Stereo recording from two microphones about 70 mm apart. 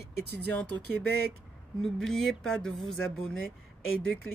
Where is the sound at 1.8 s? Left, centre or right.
Centre.